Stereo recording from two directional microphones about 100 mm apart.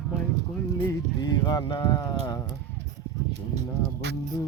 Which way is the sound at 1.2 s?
45° left (ahead or behind).